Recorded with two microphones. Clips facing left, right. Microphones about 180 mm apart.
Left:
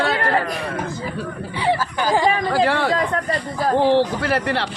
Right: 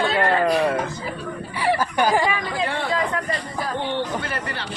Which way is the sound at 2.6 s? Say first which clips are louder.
Left 5 dB; 90° left.